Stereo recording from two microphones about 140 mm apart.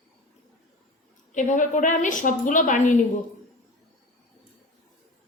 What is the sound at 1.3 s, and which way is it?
A woman's voice, 65° left (ahead or behind).